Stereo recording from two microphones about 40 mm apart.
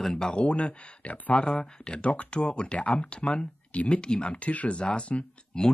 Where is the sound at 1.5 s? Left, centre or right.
Centre.